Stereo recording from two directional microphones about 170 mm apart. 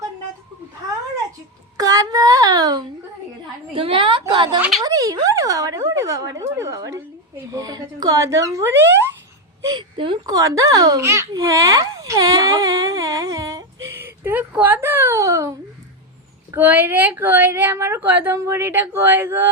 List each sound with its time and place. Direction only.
1.8 s a sound: 20° right (ahead or behind)
3.7 s a woman's voice: 30° right (ahead or behind)
4.8 s a child's voice: 20° right (ahead or behind)